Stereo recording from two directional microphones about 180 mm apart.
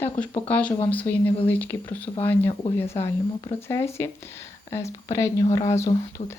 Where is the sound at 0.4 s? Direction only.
10° left (ahead or behind).